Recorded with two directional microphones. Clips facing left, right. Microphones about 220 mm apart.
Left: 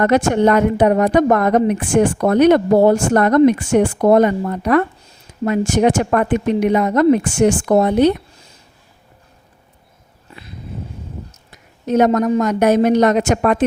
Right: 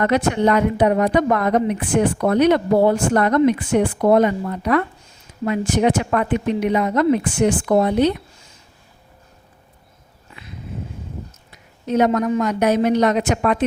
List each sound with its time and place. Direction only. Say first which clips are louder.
0.4 s speech: left 2 dB; 50° left (ahead or behind)
11.5 s speech: left 3 dB; 45° left (ahead or behind)